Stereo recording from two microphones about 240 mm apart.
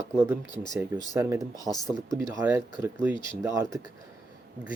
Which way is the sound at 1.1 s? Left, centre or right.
Centre.